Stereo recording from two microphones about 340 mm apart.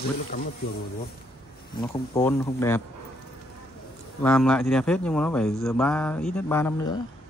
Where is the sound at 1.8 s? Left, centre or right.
Centre.